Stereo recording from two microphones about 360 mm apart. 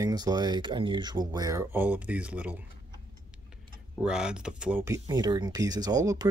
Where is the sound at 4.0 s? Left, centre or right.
Centre.